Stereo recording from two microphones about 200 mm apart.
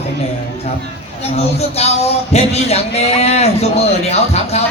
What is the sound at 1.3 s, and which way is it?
A man's voice, 30° left (ahead or behind).